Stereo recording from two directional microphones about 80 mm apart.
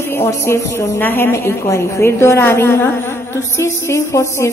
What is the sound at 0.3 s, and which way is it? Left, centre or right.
A woman's voice, left.